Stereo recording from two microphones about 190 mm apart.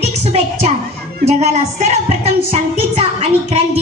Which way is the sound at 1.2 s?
35° right (ahead or behind).